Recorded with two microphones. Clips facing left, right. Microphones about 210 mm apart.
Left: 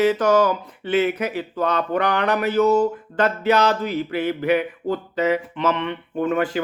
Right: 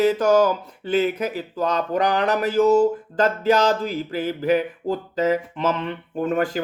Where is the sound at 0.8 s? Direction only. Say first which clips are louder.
Left 1 dB; 40° right (ahead or behind).